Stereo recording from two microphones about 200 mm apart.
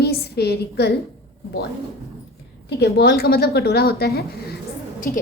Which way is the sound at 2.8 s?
55° left (ahead or behind).